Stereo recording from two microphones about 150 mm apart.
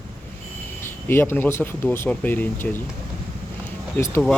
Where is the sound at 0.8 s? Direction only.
15° left (ahead or behind).